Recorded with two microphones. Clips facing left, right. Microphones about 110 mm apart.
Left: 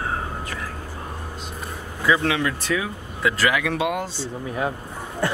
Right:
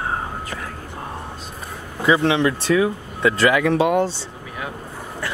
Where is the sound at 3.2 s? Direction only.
Centre (ahead or behind).